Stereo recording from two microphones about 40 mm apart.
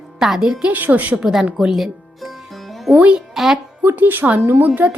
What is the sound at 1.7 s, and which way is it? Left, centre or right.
Music, centre.